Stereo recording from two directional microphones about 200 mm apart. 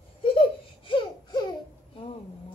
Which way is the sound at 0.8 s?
25° left (ahead or behind).